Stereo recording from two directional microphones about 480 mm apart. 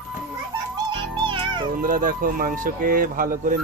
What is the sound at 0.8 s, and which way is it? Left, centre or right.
Speech, centre.